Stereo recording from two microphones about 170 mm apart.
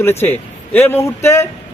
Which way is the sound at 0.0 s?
15° left (ahead or behind).